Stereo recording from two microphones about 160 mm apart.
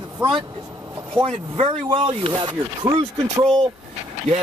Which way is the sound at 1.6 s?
35° right (ahead or behind).